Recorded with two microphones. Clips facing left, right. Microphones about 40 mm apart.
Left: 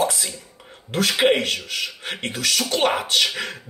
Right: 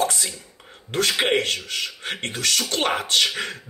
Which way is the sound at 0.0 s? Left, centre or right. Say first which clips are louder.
Left 1 dB; centre.